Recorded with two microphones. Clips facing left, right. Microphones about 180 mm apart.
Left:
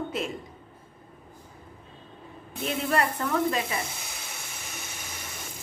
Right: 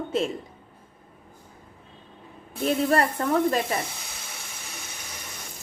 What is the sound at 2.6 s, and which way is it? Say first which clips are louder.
Speech: right 5 dB; 35° right (ahead or behind).